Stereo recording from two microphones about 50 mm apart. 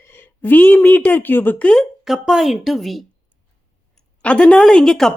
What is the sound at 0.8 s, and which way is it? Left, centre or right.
Speech, left.